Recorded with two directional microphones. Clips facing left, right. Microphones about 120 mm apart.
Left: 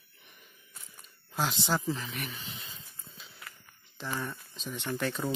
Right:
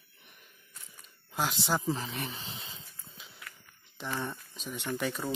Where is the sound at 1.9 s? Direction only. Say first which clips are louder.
Right 1 dB; 30° right (ahead or behind).